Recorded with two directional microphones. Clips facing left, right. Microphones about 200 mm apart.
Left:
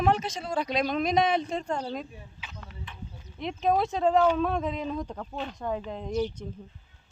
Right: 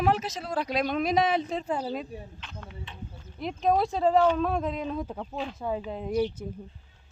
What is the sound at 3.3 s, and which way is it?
A woman's voice, centre (ahead or behind).